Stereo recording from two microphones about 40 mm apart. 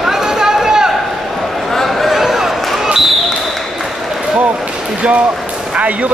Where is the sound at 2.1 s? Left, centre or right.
Centre.